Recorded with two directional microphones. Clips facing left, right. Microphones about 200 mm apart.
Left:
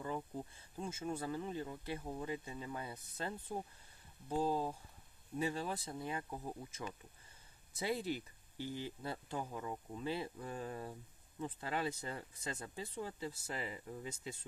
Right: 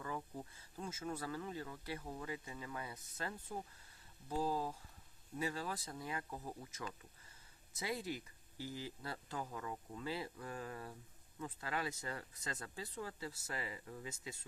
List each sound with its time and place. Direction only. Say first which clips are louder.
0.9 s speech: left 3 dB; 25° left (ahead or behind)
12.5 s speech: left 2 dB; 15° left (ahead or behind)